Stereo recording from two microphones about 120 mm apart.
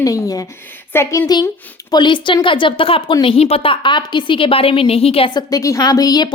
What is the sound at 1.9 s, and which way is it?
A woman's voice, 40° left (ahead or behind).